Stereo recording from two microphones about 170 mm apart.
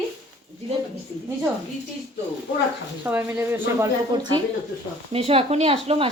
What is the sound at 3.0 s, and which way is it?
Speech, 10° right (ahead or behind).